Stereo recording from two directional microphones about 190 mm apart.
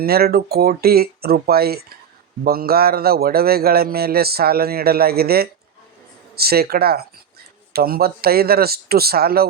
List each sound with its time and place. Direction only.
0.0 s a man's voice: 55° right (ahead or behind)